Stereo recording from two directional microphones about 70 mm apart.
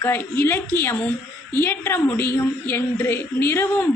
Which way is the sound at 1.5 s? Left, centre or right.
Left.